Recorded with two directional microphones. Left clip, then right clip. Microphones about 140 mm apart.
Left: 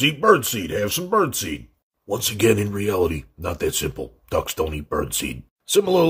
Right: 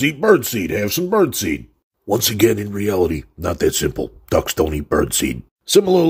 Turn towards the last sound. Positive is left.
turn(degrees=-30)  # may be behind; listen again after turning